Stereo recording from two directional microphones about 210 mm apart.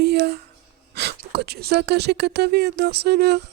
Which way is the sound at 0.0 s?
50° right (ahead or behind).